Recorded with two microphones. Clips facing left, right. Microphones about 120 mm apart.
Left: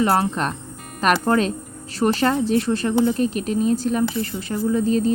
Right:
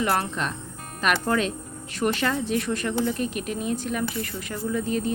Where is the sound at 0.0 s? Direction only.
35° left (ahead or behind).